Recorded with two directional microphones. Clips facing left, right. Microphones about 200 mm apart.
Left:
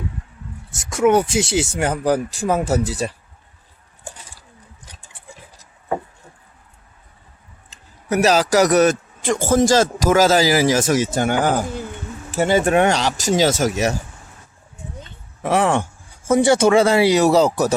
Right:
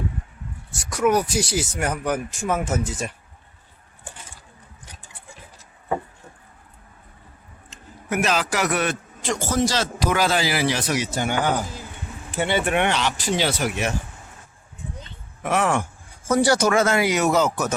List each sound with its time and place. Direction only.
0.7 s speech: 25° left (ahead or behind)
7.7 s a man's voice: 40° left (ahead or behind)
12.4 s a man's voice: 40° left (ahead or behind)
15.4 s a man's voice: 30° left (ahead or behind)